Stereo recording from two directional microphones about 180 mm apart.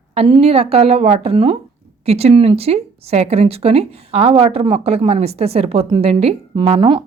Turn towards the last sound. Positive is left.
turn(degrees=-25)  # may be behind; listen again after turning